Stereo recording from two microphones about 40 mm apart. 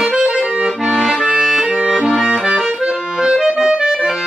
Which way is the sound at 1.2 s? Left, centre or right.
Centre.